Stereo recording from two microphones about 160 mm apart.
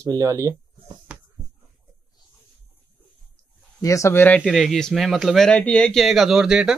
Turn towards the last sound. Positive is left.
turn(degrees=-5)  # may be behind; listen again after turning